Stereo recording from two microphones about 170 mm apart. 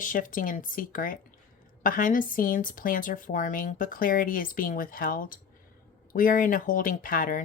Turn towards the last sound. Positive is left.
turn(degrees=55)  # may be behind; listen again after turning